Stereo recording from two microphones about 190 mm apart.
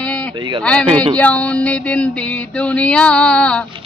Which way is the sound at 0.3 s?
25° right (ahead or behind).